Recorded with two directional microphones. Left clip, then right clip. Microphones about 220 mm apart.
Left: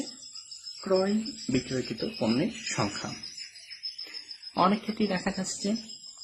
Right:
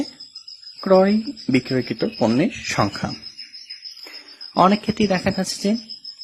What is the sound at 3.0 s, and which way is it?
Speech, 35° right (ahead or behind).